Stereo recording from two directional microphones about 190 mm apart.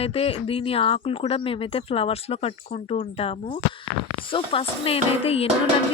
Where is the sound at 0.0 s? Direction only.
30° left (ahead or behind).